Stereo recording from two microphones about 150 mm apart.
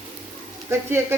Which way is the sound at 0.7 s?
15° right (ahead or behind).